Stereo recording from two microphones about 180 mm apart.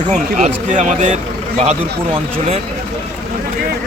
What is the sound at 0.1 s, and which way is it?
A man's voice, 40° right (ahead or behind).